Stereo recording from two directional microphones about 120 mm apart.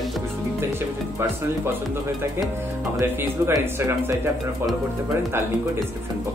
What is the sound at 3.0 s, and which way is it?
Speech, 20° right (ahead or behind).